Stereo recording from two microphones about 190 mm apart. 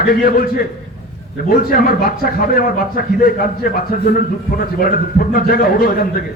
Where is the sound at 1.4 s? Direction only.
50° left (ahead or behind).